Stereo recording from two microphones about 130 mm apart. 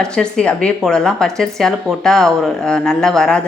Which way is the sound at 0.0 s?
5° left (ahead or behind).